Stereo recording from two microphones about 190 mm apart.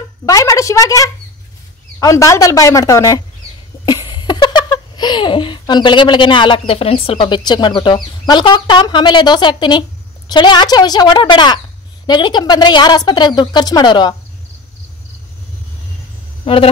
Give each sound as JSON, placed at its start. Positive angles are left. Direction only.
{"t": 0.2, "sound": "speech", "side_deg": 15}
{"t": 3.8, "sound": "a sound", "side_deg": 20}
{"t": 6.7, "sound": "speech", "side_deg": 30}
{"t": 16.5, "sound": "speech", "side_deg": 30}